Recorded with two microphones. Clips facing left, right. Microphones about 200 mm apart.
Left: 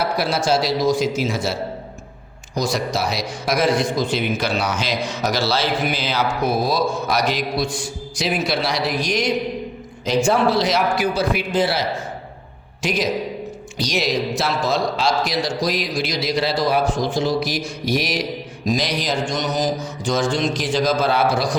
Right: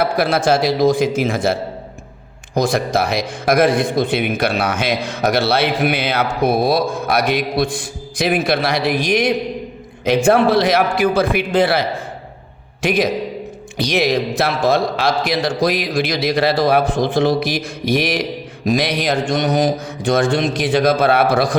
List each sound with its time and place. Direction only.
0.0 s speech: 55° right (ahead or behind)
2.6 s a man's voice: 55° right (ahead or behind)